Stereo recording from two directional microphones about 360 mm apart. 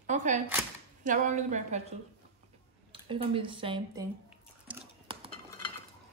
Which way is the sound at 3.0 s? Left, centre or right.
Centre.